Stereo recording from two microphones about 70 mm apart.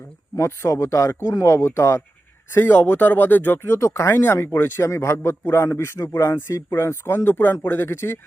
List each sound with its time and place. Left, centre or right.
0.3 s speech: left